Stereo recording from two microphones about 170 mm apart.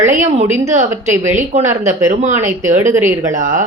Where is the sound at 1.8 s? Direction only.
45° right (ahead or behind).